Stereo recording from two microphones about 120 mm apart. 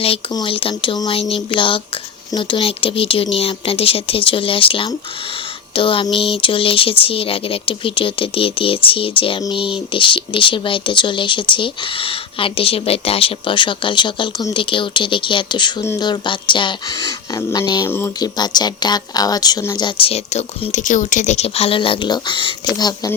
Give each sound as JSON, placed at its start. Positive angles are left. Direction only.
{"t": 0.3, "sound": "speech", "side_deg": 45}
{"t": 1.1, "sound": "speech", "side_deg": 50}
{"t": 17.8, "sound": "speech", "side_deg": 20}
{"t": 18.2, "sound": "speech", "side_deg": 35}
{"t": 20.0, "sound": "speech", "side_deg": 55}